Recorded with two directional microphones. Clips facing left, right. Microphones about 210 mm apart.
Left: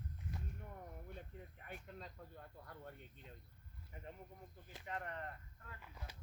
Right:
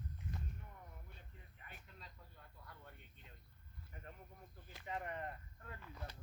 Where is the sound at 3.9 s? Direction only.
20° left (ahead or behind).